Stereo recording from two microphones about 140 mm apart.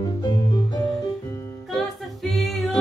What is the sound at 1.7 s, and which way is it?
A capella, centre (ahead or behind).